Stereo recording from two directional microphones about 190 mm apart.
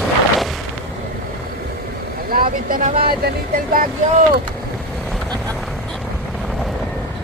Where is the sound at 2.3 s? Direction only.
45° right (ahead or behind).